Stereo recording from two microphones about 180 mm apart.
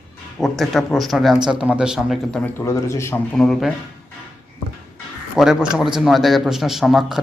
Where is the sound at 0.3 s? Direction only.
Centre (ahead or behind).